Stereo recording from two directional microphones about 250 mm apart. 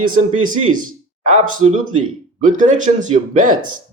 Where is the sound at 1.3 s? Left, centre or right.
Right.